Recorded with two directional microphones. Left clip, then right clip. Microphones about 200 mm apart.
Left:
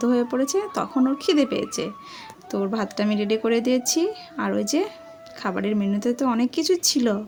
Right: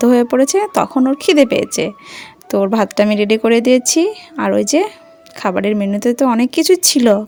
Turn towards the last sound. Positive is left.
turn(degrees=-40)  # may be behind; listen again after turning